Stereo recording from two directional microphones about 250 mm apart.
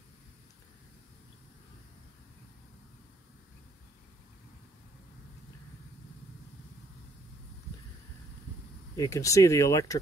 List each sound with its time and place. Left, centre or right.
8.9 s speech: centre